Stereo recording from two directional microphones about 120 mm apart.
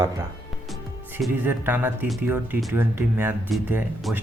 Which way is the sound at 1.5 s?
15° right (ahead or behind).